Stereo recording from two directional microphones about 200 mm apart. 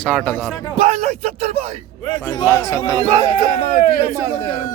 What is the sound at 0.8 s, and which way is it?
Speech, 35° right (ahead or behind).